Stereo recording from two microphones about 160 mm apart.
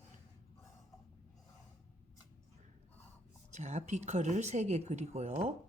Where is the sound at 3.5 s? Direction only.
45° right (ahead or behind).